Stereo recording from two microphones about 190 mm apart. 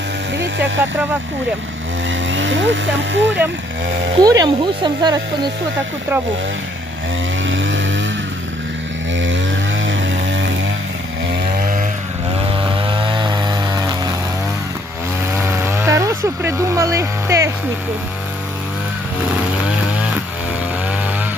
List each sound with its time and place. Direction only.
0.3 s music: 65° right (ahead or behind)
2.0 s speech: 80° right
4.2 s speech: 20° right (ahead or behind)
7.4 s chainsaw: 80° right
9.1 s a sound: 80° right
11.6 s vehicle: 45° right (ahead or behind)
12.5 s chainsaw: 25° right (ahead or behind)
15.4 s chainsaw: 10° right (ahead or behind)